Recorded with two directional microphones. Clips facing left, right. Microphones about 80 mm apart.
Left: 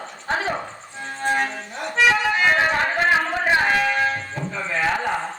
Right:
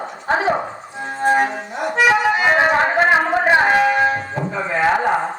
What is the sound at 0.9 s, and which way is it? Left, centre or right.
Music, centre.